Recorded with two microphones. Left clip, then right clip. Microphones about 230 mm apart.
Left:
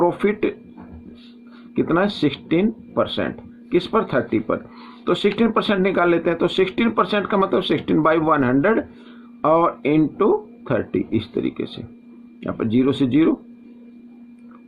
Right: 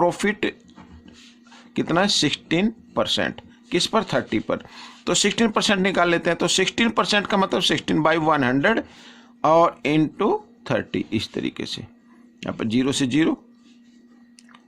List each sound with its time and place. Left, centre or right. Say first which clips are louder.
0.0 s speech: left 2 dB; right
1.7 s speech: even; right